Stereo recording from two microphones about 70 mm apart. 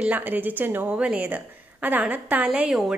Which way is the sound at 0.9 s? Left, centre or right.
Centre.